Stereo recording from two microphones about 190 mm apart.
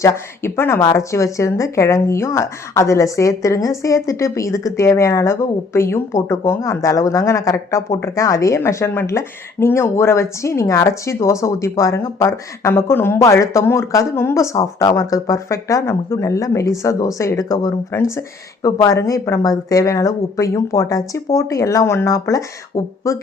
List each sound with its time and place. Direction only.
0.0 s speech: 15° left (ahead or behind)